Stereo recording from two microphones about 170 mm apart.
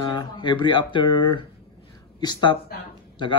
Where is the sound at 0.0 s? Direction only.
25° left (ahead or behind).